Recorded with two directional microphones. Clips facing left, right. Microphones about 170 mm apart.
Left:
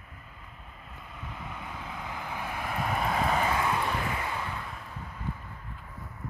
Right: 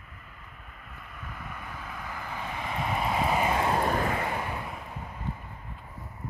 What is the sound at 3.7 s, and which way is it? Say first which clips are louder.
Vehicle: right 4 dB; 45° right (ahead or behind).